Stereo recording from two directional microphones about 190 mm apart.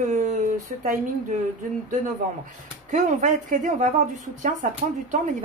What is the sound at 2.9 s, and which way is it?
A woman's voice, 40° right (ahead or behind).